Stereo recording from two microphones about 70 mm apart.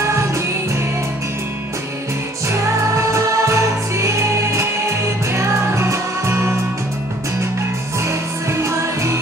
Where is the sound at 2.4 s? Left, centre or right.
Right.